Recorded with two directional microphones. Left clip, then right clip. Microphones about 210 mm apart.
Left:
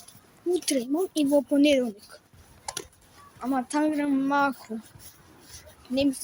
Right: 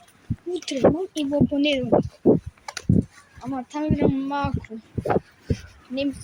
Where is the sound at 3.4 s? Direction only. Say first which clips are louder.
Left 2 dB; 10° left (ahead or behind).